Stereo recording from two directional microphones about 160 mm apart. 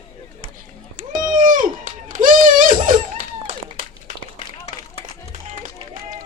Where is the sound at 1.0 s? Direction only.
60° right (ahead or behind).